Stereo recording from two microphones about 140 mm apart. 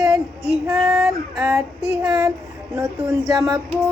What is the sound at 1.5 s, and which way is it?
Child singing, 20° right (ahead or behind).